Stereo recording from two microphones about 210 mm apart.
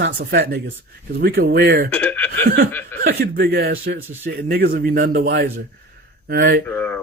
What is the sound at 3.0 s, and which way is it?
Speech, 50° right (ahead or behind).